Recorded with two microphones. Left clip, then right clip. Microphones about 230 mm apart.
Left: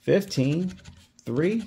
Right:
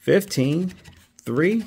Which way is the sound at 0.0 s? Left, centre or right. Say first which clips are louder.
Right 4 dB; right.